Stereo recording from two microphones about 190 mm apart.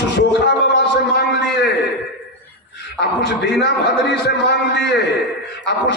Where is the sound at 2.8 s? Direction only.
60° left (ahead or behind).